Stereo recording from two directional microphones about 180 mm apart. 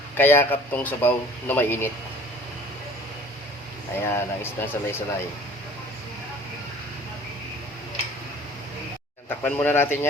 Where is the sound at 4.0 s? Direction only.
15° left (ahead or behind).